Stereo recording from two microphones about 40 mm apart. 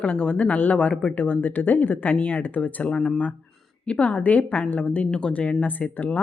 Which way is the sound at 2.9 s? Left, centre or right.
Centre.